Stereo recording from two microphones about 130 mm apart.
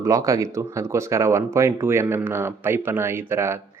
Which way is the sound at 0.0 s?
25° right (ahead or behind).